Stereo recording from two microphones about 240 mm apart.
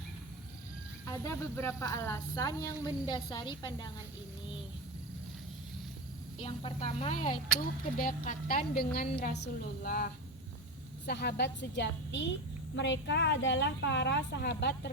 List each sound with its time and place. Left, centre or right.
1.1 s speech: centre
6.4 s a woman's voice: left